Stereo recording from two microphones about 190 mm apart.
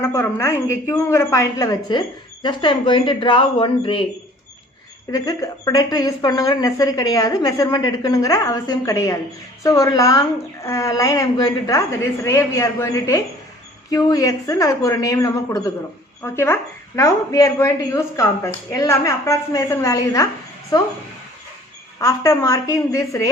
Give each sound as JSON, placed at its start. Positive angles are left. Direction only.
{"t": 0.0, "sound": "a woman's voice", "side_deg": 15}
{"t": 5.1, "sound": "a woman's voice", "side_deg": 20}
{"t": 22.0, "sound": "speech", "side_deg": 15}